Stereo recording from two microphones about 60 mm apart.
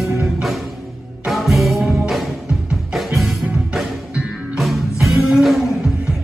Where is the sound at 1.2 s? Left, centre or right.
Centre.